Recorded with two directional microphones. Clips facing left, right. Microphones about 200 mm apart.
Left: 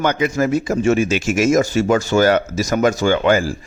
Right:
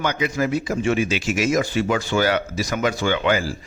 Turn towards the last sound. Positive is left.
turn(degrees=45)  # may be behind; listen again after turning